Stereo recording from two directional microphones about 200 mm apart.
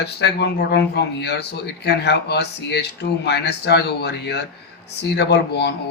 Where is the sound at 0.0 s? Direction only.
60° left (ahead or behind).